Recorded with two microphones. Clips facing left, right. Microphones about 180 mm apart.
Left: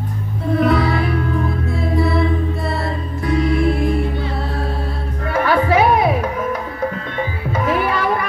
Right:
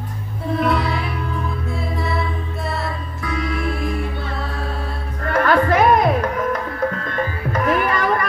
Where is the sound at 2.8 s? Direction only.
30° left (ahead or behind).